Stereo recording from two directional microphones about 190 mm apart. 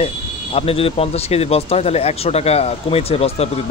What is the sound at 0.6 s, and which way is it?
A man's voice, 30° left (ahead or behind).